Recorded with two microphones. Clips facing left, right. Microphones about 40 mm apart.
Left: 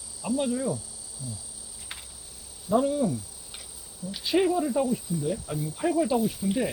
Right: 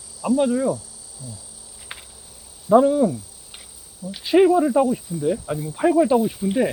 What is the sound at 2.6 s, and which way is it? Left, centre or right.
Speech, centre.